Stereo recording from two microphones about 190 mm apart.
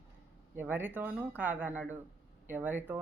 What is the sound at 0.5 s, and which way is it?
Speech, 10° right (ahead or behind).